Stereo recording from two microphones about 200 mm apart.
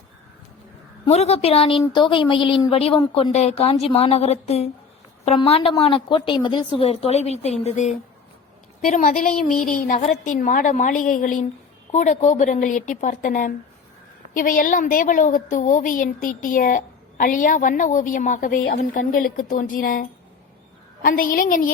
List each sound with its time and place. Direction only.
1.0 s a woman's voice: 30° left (ahead or behind)